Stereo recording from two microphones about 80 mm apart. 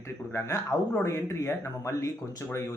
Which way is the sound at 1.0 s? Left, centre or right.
Left.